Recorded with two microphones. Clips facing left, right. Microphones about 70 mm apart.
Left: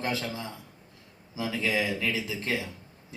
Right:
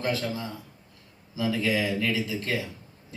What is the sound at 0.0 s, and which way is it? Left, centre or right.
Speech, left.